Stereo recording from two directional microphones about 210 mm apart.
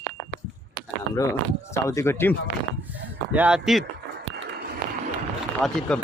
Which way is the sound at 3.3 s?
5° right (ahead or behind).